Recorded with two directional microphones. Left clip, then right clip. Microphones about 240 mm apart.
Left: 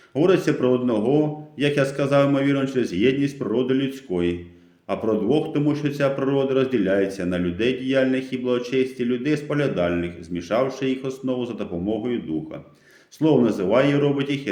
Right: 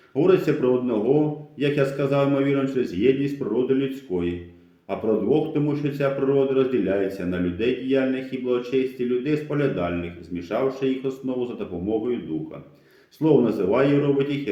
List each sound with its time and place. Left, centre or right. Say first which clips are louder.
0.1 s speech: even; left
13.1 s speech: even; left